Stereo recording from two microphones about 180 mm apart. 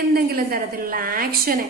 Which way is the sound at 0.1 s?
55° right (ahead or behind).